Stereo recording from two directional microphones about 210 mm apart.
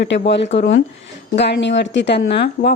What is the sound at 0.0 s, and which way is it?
Speech, 55° left (ahead or behind).